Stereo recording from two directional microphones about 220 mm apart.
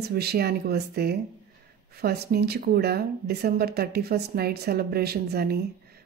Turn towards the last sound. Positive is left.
turn(degrees=-45)  # may be behind; listen again after turning